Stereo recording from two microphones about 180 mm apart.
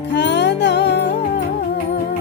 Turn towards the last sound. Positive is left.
turn(degrees=70)  # may be behind; listen again after turning